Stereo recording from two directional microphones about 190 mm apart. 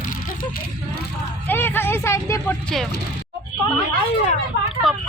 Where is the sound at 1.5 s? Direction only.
10° left (ahead or behind).